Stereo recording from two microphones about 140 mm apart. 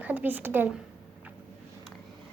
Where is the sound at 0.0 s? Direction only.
10° right (ahead or behind).